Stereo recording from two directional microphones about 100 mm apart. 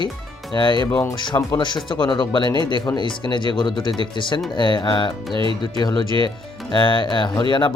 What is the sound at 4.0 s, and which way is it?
Music, 55° left (ahead or behind).